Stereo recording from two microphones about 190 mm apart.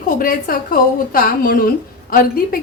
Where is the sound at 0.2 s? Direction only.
50° left (ahead or behind).